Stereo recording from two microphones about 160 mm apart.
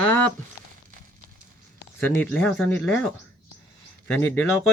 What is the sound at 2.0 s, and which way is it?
Speech, 10° left (ahead or behind).